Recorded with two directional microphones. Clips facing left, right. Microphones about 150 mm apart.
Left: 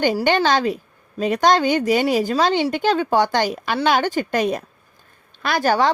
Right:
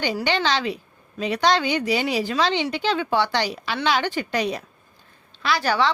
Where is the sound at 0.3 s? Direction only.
50° left (ahead or behind).